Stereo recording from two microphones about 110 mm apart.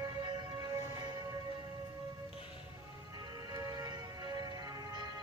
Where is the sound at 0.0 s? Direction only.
40° right (ahead or behind).